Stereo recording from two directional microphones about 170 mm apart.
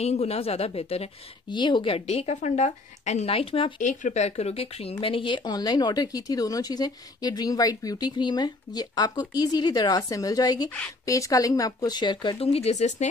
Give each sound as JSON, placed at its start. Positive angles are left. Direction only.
{"t": 0.0, "sound": "a woman's voice", "side_deg": 40}
{"t": 3.8, "sound": "a woman's voice", "side_deg": 45}